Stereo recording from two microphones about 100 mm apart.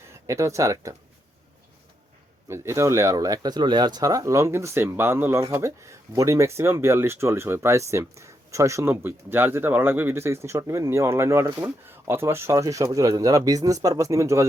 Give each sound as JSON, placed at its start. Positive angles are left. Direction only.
{"t": 0.1, "sound": "speech", "side_deg": -30}
{"t": 2.5, "sound": "speech", "side_deg": -30}